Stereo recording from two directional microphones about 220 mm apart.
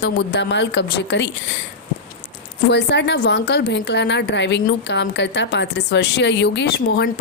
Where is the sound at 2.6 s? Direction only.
50° left (ahead or behind).